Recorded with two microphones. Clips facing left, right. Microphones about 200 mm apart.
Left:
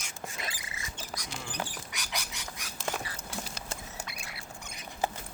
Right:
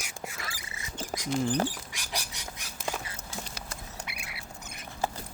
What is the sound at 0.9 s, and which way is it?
Rodents, 30° right (ahead or behind).